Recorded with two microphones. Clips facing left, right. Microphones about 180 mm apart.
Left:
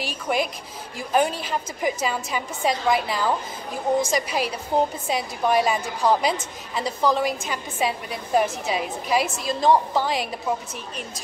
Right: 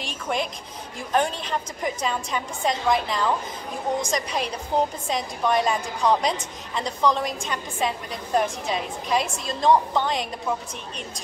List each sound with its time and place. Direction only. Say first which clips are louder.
0.0 s a woman's voice: left 3 dB; 5° left (ahead or behind)